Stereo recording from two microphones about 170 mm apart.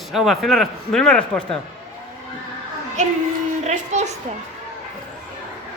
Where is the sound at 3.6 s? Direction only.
40° right (ahead or behind).